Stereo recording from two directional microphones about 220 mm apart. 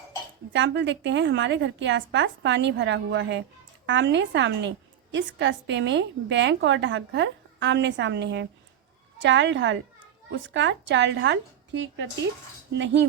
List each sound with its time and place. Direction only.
0.5 s a woman's voice: 55° right (ahead or behind)